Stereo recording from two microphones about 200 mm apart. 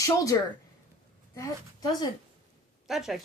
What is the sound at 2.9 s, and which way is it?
Speech, centre (ahead or behind).